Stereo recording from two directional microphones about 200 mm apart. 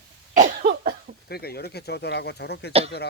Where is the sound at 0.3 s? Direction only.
40° right (ahead or behind).